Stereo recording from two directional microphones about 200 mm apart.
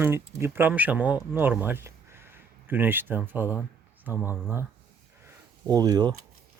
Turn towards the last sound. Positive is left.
turn(degrees=-20)  # may be behind; listen again after turning